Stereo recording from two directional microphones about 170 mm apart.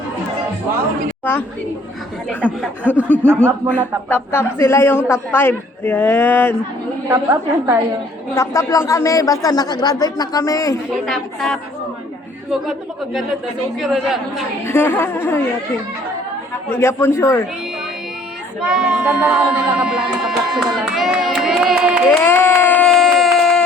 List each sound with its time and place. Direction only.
1.2 s a woman's voice: 10° left (ahead or behind)
2.8 s a woman's voice: 10° right (ahead or behind)
4.1 s a man's voice: 15° left (ahead or behind)
7.1 s a woman's voice: 15° right (ahead or behind)
8.4 s speech: 15° left (ahead or behind)
10.9 s music: centre (ahead or behind)
13.7 s music: centre (ahead or behind)
14.7 s a man's voice: 15° left (ahead or behind)
16.6 s a man's voice: 15° left (ahead or behind)
18.6 s music: 5° right (ahead or behind)
22.2 s baby cry: 15° left (ahead or behind)